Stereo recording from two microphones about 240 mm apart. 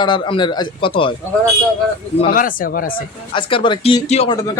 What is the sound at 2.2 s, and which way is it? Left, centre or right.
Speech, left.